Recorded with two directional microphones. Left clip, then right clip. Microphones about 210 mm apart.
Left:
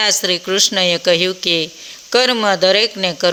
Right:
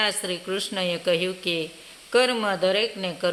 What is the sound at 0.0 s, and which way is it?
Speech, 30° left (ahead or behind).